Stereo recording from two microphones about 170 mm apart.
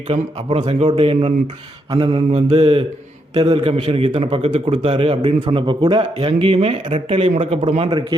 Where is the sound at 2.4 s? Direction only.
30° right (ahead or behind).